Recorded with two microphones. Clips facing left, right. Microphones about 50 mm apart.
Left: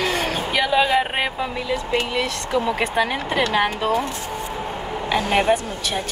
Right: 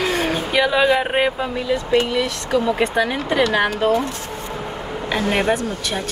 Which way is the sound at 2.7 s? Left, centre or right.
Centre.